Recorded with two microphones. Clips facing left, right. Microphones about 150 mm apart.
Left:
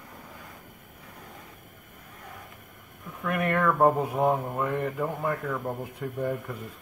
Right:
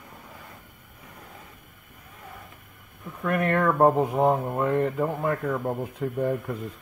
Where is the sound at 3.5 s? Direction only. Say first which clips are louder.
Right 2 dB; 15° right (ahead or behind).